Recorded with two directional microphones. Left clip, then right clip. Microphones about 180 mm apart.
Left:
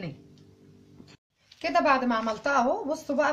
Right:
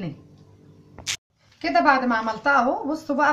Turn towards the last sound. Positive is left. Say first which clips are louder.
# right 4 dB
turn(degrees=25)  # may be behind; listen again after turning